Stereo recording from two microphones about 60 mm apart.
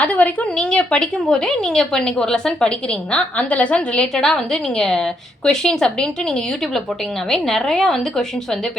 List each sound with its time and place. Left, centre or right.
0.0 s speech: left
4.1 s speech: centre
7.3 s speech: centre